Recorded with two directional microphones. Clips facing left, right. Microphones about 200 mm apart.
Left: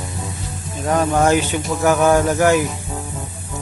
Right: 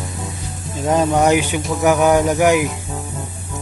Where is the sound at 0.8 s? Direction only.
20° right (ahead or behind).